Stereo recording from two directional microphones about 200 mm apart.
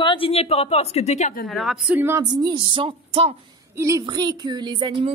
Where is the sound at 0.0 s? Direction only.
25° left (ahead or behind); by 1.5 s 40° left (ahead or behind).